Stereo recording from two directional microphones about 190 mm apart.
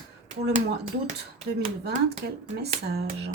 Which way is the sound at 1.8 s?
60° right (ahead or behind).